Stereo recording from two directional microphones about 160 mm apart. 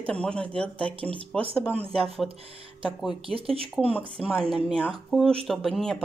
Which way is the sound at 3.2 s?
35° right (ahead or behind).